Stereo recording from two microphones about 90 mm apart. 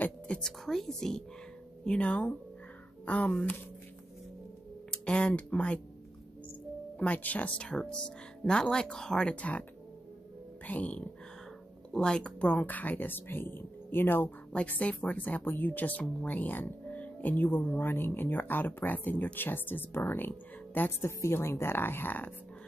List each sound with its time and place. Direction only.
0.4 s a woman's voice: 5° left (ahead or behind)
4.9 s speech: 10° left (ahead or behind)
7.0 s speech: 15° left (ahead or behind)
10.7 s speech: 15° left (ahead or behind)